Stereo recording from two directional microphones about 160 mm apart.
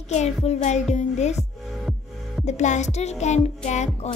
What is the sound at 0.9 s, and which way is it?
Music, 45° left (ahead or behind).